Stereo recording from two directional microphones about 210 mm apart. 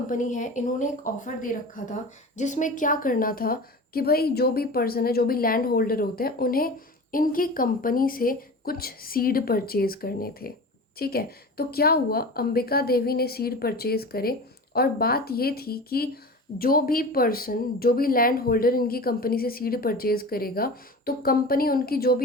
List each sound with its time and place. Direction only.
0.1 s a woman's voice: 35° left (ahead or behind)